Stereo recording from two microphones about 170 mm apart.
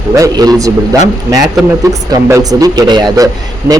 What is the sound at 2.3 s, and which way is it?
Speech, 20° right (ahead or behind).